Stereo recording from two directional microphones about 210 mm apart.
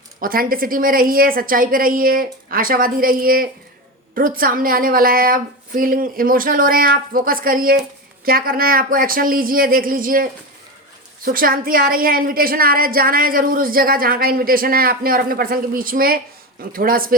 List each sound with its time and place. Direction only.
0.2 s a woman's voice: 45° right (ahead or behind)
11.3 s a woman's voice: 45° right (ahead or behind)